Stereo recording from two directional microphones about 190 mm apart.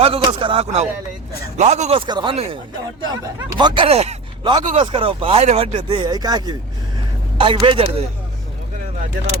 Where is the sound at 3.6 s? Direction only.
25° right (ahead or behind).